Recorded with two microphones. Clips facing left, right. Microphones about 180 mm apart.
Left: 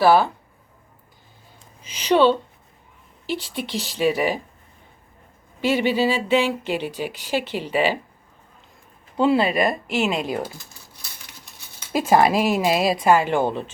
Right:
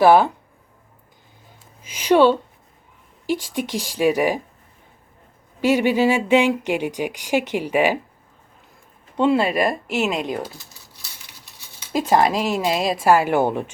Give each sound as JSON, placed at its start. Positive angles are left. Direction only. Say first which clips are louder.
{"t": 0.0, "sound": "speech", "louder": "right 3 dB", "side_deg": -15}
{"t": 1.8, "sound": "speech", "louder": "right 2 dB", "side_deg": -10}
{"t": 5.5, "sound": "speech", "louder": "right 3 dB", "side_deg": -10}
{"t": 9.1, "sound": "speech", "louder": "even", "side_deg": 0}
{"t": 11.9, "sound": "speech", "louder": "left 1 dB", "side_deg": 10}
{"t": 13.0, "sound": "speech", "louder": "right 1 dB", "side_deg": -10}